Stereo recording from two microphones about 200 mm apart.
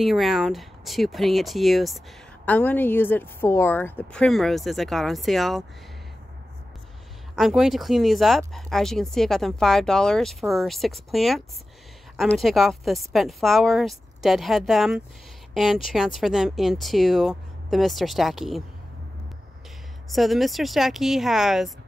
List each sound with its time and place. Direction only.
0.0 s speech: centre (ahead or behind)
7.3 s speech: centre (ahead or behind)
20.1 s speech: centre (ahead or behind)